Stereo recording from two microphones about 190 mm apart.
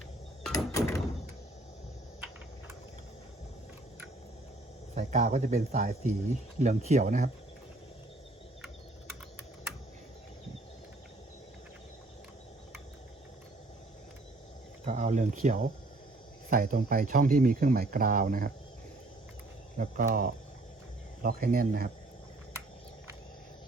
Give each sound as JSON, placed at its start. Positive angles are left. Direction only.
{"t": 0.5, "sound": "door", "side_deg": 15}
{"t": 4.9, "sound": "speech", "side_deg": -40}
{"t": 14.8, "sound": "a sound", "side_deg": -40}
{"t": 16.5, "sound": "speech", "side_deg": -50}
{"t": 19.8, "sound": "speech", "side_deg": -45}